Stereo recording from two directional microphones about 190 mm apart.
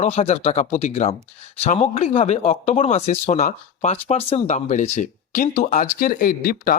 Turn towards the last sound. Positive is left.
turn(degrees=50)  # may be behind; listen again after turning